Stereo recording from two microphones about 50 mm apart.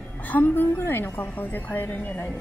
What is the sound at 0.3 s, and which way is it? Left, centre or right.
A woman's voice, left.